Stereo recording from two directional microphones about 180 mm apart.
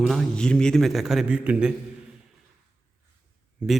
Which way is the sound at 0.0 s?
Centre (ahead or behind).